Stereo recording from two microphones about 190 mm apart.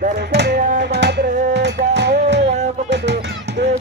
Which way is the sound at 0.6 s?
45° right (ahead or behind).